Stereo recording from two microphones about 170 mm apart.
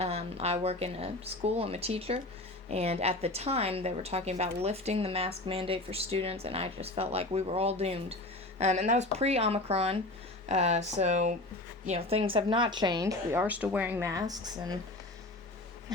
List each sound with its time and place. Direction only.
0.0 s a woman's voice: 35° right (ahead or behind)